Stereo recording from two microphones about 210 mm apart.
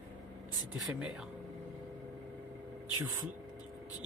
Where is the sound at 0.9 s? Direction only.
5° right (ahead or behind).